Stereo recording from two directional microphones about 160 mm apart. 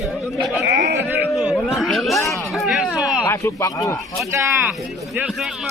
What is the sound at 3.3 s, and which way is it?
Speech, 20° left (ahead or behind).